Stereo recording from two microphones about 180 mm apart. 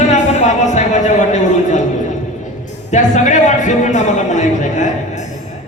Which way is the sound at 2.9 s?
40° left (ahead or behind).